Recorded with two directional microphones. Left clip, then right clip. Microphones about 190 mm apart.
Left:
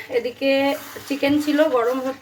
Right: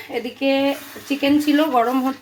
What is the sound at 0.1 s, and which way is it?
Speech, 25° right (ahead or behind).